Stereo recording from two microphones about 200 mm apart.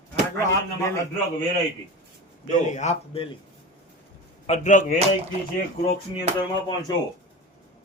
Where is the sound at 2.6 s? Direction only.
35° left (ahead or behind).